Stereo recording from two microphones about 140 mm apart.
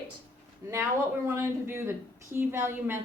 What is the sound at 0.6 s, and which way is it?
A woman's voice, 20° right (ahead or behind).